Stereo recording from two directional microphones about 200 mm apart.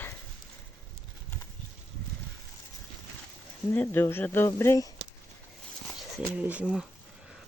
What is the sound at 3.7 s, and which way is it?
Speech, 10° left (ahead or behind).